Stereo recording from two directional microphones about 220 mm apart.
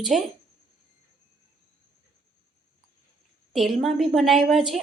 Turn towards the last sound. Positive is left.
turn(degrees=0)  # may be behind; listen again after turning